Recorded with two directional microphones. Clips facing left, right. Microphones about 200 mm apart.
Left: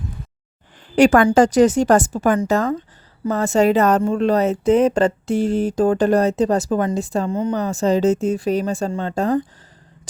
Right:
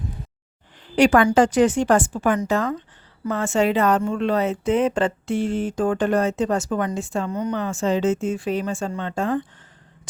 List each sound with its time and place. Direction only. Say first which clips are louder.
0.9 s speech: left 3 dB; 45° left (ahead or behind); by 7.5 s 30° left (ahead or behind)
7.5 s speech: left 4 dB; 40° left (ahead or behind)